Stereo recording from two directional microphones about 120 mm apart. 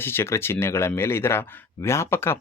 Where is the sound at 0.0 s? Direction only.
20° left (ahead or behind).